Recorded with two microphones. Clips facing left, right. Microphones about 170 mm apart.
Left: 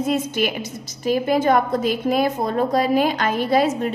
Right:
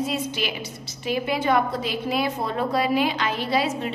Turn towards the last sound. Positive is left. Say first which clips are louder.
# left 6 dB
turn(degrees=45)  # may be behind; listen again after turning